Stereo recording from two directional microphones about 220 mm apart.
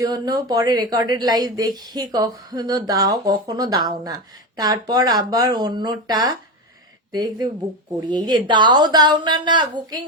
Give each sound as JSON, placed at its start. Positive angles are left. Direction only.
{"t": 0.1, "sound": "speech", "side_deg": -15}